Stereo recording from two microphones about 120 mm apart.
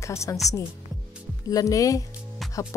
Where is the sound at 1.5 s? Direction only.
30° left (ahead or behind).